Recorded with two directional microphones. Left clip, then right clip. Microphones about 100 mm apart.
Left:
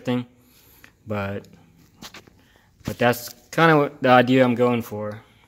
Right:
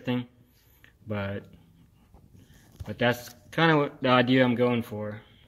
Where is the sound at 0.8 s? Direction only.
20° left (ahead or behind).